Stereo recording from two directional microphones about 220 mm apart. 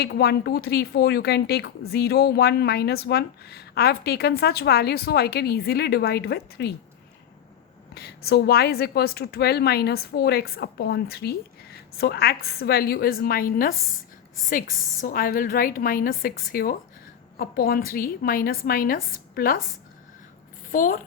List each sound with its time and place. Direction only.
0.0 s speech: 45° left (ahead or behind)
7.9 s speech: 45° left (ahead or behind)
15.0 s a woman's voice: 40° left (ahead or behind)
20.7 s a woman's voice: 40° left (ahead or behind)